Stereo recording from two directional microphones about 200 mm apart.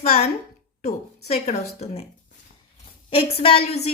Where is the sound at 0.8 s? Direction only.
35° left (ahead or behind).